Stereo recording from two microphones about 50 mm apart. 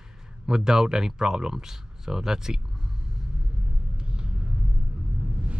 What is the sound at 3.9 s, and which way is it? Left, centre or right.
Vehicle, centre.